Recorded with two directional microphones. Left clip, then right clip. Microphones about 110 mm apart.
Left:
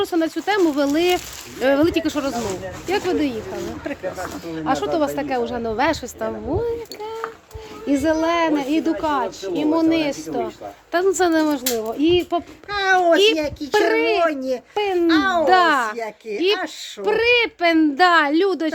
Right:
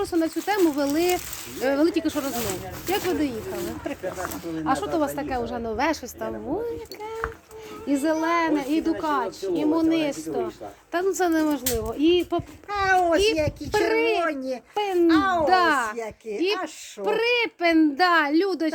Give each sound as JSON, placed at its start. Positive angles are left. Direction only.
{"t": 0.0, "sound": "a child's voice", "side_deg": 45}
{"t": 3.5, "sound": "speech", "side_deg": 0}
{"t": 4.4, "sound": "speech", "side_deg": 25}
{"t": 5.1, "sound": "a child's voice", "side_deg": 45}
{"t": 5.7, "sound": "speech", "side_deg": 25}
{"t": 7.9, "sound": "a child's voice", "side_deg": 35}
{"t": 13.9, "sound": "a child's voice", "side_deg": 40}